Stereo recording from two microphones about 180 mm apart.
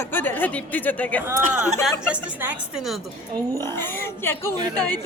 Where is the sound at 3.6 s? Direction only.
10° left (ahead or behind).